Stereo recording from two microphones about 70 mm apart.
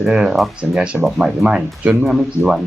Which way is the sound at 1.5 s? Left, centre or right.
Centre.